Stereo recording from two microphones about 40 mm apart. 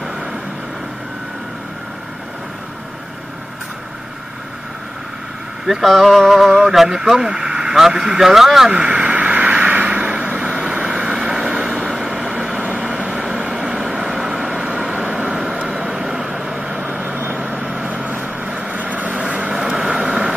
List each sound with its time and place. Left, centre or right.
5.9 s speech: centre; by 8.2 s right
8.2 s speech: centre
8.8 s vehicle: right
9.9 s vehicle: right
12.5 s vehicle: right
12.8 s vehicle: centre
16.9 s vehicle: right
19.5 s vehicle: centre